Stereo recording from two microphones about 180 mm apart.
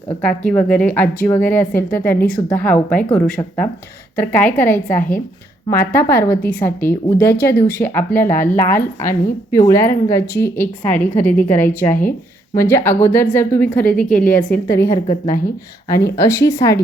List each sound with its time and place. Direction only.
0.2 s a woman's voice: 5° left (ahead or behind)